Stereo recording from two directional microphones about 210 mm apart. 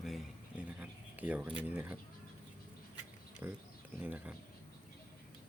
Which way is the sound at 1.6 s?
10° right (ahead or behind).